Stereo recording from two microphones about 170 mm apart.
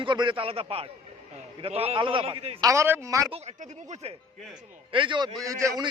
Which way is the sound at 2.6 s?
15° right (ahead or behind).